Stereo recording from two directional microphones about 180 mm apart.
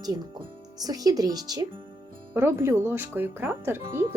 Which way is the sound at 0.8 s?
20° right (ahead or behind).